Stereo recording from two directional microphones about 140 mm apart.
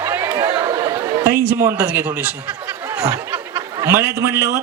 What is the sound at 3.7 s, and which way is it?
Speech, 20° right (ahead or behind).